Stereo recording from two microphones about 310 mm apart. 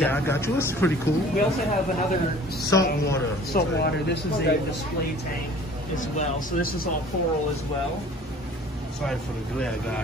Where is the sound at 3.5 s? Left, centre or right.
Left.